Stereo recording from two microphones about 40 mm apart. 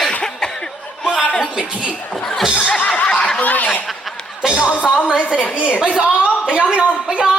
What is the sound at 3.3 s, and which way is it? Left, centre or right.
Honk, left.